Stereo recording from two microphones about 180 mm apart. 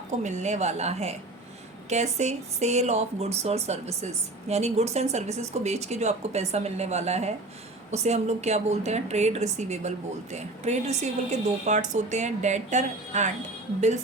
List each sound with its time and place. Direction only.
0.2 s speech: 40° right (ahead or behind)